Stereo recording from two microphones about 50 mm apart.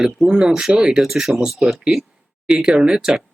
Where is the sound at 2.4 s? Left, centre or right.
Centre.